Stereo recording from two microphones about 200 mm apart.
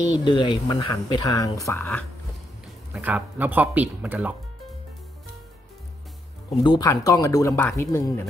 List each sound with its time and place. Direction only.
0.2 s speech: 25° left (ahead or behind)
2.9 s speech: 10° right (ahead or behind)
6.6 s speech: 20° left (ahead or behind)